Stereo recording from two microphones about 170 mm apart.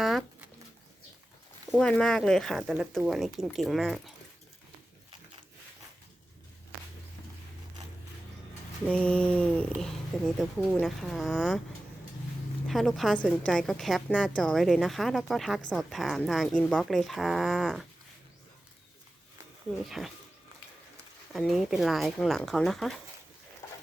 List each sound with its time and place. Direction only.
0.0 s a sound: centre (ahead or behind)
1.7 s a woman's voice: 5° left (ahead or behind)
8.9 s a woman's voice: 5° left (ahead or behind)
12.6 s a woman's voice: centre (ahead or behind)
19.9 s a woman's voice: centre (ahead or behind)
21.3 s a woman's voice: centre (ahead or behind)
23.6 s a sound: 15° left (ahead or behind)